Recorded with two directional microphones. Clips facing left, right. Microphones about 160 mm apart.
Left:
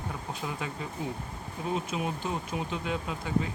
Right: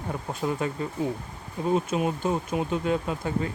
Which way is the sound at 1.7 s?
50° right (ahead or behind).